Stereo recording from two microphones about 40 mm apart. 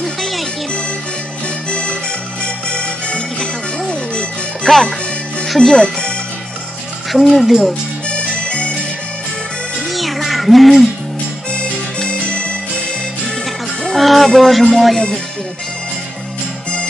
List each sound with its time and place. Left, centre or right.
0.0 s music: centre
1.7 s music: left
4.7 s speech: centre
7.1 s music: centre
8.1 s music: left
9.8 s music: centre
12.1 s music: left
13.8 s music: centre